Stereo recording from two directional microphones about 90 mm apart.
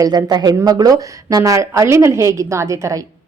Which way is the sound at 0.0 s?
45° right (ahead or behind).